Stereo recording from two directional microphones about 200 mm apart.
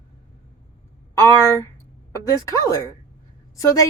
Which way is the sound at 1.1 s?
15° left (ahead or behind).